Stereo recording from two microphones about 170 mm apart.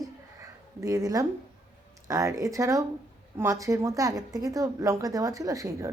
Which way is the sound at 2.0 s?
20° right (ahead or behind).